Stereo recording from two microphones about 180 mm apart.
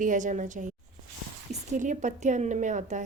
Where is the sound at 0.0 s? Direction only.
45° right (ahead or behind).